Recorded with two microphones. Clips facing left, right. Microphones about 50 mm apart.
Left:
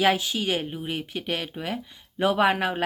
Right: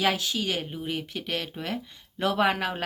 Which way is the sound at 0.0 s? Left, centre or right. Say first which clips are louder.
Left 4 dB; centre.